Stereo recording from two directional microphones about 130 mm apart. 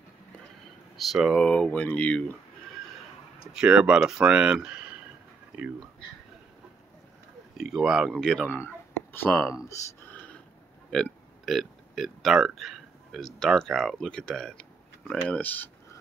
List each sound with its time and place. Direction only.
0.9 s speech: centre (ahead or behind)
3.5 s speech: 5° right (ahead or behind)
7.5 s speech: centre (ahead or behind)
8.5 s speech: 15° left (ahead or behind)
10.0 s a sound: 10° left (ahead or behind)
10.9 s speech: 5° left (ahead or behind)